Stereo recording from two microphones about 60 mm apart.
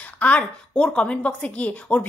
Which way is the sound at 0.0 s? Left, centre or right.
Left.